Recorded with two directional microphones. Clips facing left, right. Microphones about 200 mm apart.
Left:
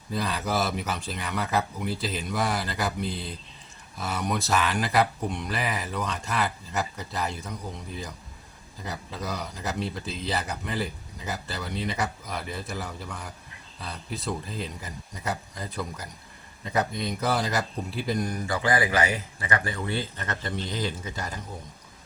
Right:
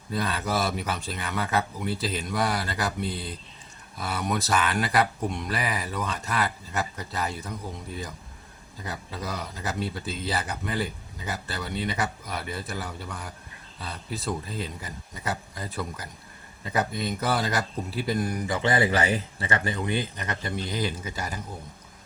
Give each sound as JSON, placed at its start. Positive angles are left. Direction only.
{"t": 0.1, "sound": "speech", "side_deg": 0}
{"t": 8.8, "sound": "speech", "side_deg": 0}
{"t": 18.4, "sound": "speech", "side_deg": -20}